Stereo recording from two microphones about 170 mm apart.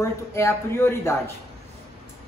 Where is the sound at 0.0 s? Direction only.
15° left (ahead or behind).